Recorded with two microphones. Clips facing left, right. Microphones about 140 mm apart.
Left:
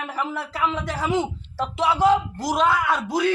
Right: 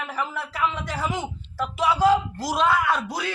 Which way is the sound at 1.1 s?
25° left (ahead or behind).